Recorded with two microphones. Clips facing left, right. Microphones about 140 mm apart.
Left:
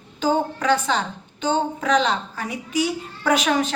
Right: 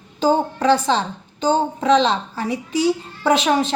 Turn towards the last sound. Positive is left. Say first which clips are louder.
# right 3 dB
turn(degrees=-30)  # may be behind; listen again after turning